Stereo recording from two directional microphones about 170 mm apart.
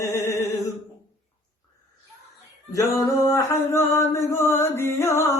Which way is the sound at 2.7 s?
15° left (ahead or behind).